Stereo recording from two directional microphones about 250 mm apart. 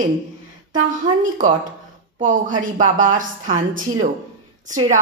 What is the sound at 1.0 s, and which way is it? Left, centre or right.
A woman's voice, right.